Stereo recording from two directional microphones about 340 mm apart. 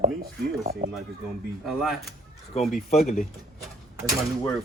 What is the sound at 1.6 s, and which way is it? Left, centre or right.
Speech, centre.